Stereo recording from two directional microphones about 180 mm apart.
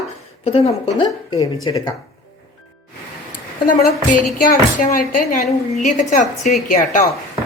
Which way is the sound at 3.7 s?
50° left (ahead or behind).